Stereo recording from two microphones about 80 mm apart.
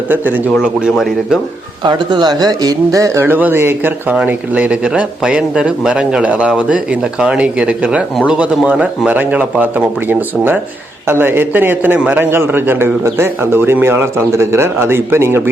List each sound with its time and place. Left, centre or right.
0.1 s a man's voice: right
0.5 s speech: centre
1.8 s a man's voice: right
3.2 s a man's voice: right
4.1 s a man's voice: centre; by 15.4 s right